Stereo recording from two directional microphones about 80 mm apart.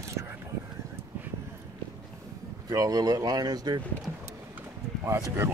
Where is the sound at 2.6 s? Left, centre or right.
Right.